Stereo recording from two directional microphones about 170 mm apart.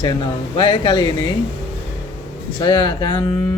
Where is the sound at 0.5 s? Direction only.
25° left (ahead or behind).